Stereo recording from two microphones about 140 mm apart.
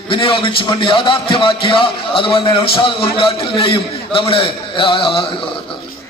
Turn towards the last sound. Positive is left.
turn(degrees=40)  # may be behind; listen again after turning